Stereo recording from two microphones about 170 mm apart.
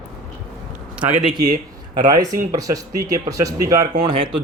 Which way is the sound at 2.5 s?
20° right (ahead or behind).